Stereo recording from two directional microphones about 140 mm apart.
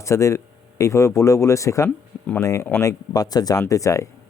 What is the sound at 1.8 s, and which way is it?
Speech, 10° left (ahead or behind).